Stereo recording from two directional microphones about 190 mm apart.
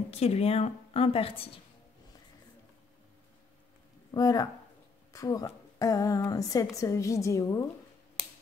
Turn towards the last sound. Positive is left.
turn(degrees=15)  # may be behind; listen again after turning